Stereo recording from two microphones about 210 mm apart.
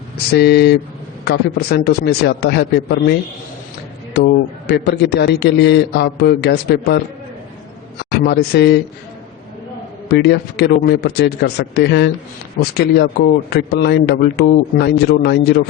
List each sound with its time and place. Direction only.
0.3 s a man's voice: 50° left (ahead or behind)
8.1 s a man's voice: 50° left (ahead or behind)
10.1 s a man's voice: 50° left (ahead or behind)